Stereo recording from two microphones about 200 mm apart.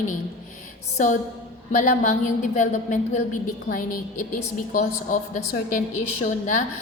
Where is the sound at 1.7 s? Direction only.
40° left (ahead or behind).